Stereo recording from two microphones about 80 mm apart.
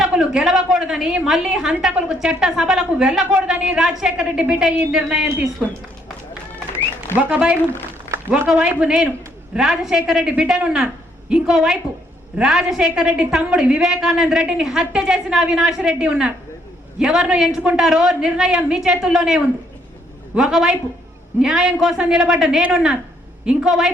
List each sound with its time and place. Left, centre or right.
0.0 s a woman's voice: centre
7.2 s a woman's voice: centre
8.8 s a woman's voice: centre